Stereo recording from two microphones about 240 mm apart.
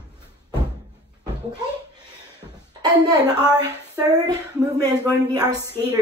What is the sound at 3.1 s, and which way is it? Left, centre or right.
Speech, centre.